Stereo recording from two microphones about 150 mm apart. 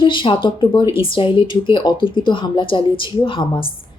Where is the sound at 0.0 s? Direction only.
35° left (ahead or behind).